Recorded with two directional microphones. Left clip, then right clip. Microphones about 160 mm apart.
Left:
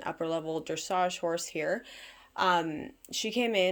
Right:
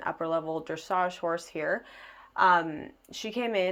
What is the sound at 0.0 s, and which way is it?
Speech, 35° left (ahead or behind).